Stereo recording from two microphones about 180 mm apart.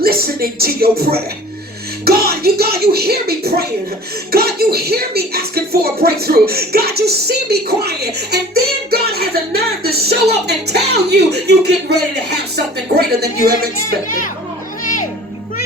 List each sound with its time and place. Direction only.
0.0 s speech: 60° right (ahead or behind)